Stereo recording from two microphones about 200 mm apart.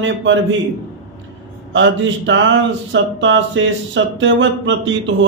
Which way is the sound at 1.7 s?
65° right (ahead or behind).